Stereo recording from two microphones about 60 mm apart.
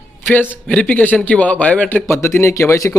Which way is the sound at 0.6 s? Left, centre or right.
Left.